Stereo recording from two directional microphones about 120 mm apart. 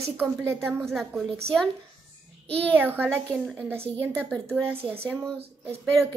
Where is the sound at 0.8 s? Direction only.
Centre (ahead or behind).